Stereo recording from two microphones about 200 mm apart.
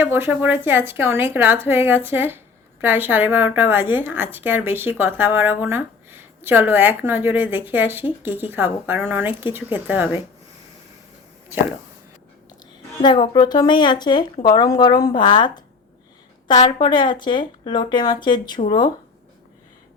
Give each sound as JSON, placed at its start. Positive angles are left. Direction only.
{"t": 0.0, "sound": "a woman's voice", "side_deg": -10}
{"t": 13.0, "sound": "speech", "side_deg": 20}